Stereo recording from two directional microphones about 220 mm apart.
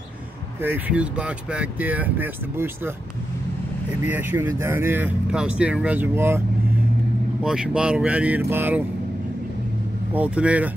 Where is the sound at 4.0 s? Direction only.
10° right (ahead or behind).